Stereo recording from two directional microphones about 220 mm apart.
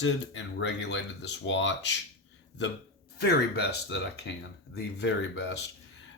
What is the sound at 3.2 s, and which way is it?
Speech, 45° left (ahead or behind).